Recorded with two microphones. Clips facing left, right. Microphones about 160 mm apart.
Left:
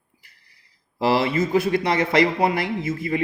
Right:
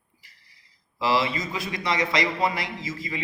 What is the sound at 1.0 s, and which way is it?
A man's voice, 55° left (ahead or behind).